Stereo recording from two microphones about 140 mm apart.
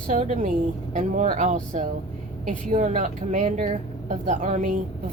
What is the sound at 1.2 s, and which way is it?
A woman's voice, 65° right (ahead or behind).